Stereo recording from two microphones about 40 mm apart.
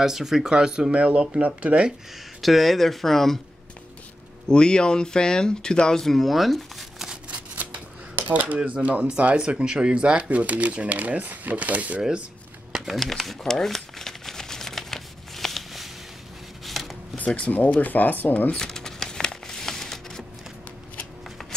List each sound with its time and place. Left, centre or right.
0.0 s speech: centre
0.9 s speech: right
2.4 s speech: centre
4.5 s speech: left; by 7.1 s centre
7.2 s a sound: right
9.0 s speech: right
10.4 s speech: right
12.7 s shuffling cards: centre
17.5 s speech: left
18.5 s crumpling: centre